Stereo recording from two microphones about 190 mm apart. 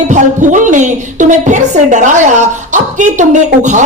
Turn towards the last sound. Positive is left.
turn(degrees=-40)  # may be behind; listen again after turning